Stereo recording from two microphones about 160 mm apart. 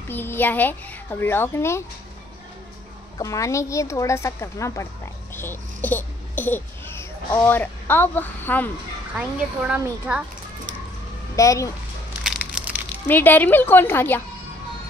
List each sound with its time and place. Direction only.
0.1 s a child's voice: 15° left (ahead or behind)
3.2 s speech: 20° left (ahead or behind)
5.3 s babbling: 15° left (ahead or behind)
9.1 s a child's voice: 10° right (ahead or behind)
11.3 s speech: 20° left (ahead or behind)
13.0 s a child's voice: 10° left (ahead or behind)